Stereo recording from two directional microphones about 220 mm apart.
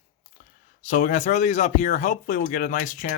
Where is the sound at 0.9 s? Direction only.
35° left (ahead or behind).